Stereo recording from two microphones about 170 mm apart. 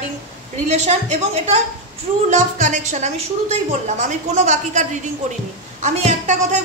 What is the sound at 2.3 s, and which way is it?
A woman's voice, 45° right (ahead or behind).